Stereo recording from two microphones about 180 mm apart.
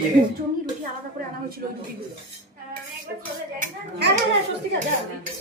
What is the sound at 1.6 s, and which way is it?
Speech, 55° right (ahead or behind).